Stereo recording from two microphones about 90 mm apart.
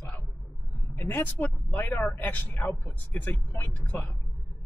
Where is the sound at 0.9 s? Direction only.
20° left (ahead or behind).